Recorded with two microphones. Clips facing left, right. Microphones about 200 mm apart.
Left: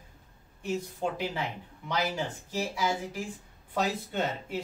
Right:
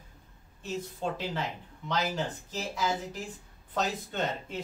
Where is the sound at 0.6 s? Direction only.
10° left (ahead or behind).